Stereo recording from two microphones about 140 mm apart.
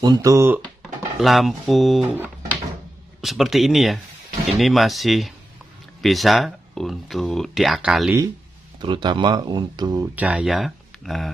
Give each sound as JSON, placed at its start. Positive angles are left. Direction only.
{"t": 0.0, "sound": "speech", "side_deg": -25}
{"t": 0.8, "sound": "speech", "side_deg": 0}
{"t": 3.2, "sound": "speech", "side_deg": 0}
{"t": 8.8, "sound": "speech", "side_deg": -35}
{"t": 10.1, "sound": "speech", "side_deg": -10}